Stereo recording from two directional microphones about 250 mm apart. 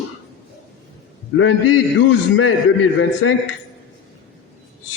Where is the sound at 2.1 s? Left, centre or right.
Left.